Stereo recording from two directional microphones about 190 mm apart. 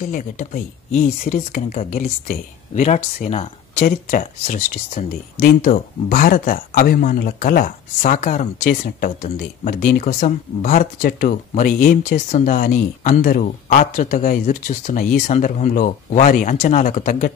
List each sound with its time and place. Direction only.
0.1 s speech: 45° left (ahead or behind)